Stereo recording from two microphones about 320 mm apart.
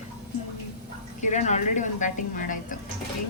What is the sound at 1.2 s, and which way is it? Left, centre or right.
Speech, left.